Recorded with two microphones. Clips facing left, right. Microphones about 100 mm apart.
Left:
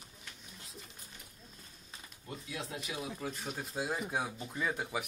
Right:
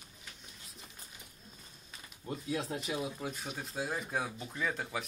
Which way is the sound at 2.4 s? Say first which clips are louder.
Right 6 dB; 35° right (ahead or behind).